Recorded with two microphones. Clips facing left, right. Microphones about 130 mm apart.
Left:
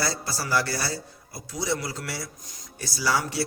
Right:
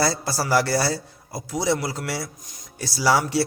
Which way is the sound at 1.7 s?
75° right (ahead or behind).